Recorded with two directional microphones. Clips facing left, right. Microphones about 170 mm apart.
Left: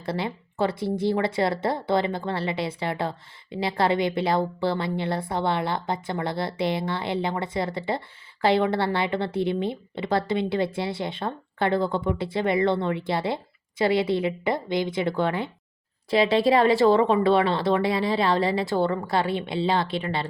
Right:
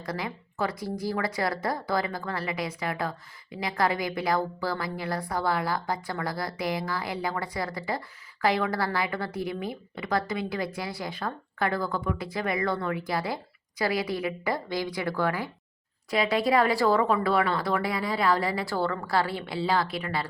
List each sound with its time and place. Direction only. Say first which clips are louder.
0.0 s speech: left 5 dB; 25° left (ahead or behind)